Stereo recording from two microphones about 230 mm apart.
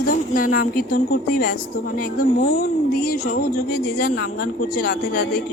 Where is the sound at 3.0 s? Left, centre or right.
Left.